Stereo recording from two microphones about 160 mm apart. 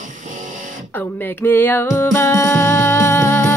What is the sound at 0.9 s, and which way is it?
Music, 10° left (ahead or behind).